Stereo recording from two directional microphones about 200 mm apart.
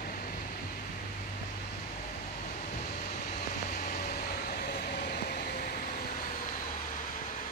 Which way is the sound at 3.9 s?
45° left (ahead or behind).